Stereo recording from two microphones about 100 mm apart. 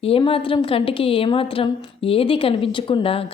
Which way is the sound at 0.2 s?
65° left (ahead or behind).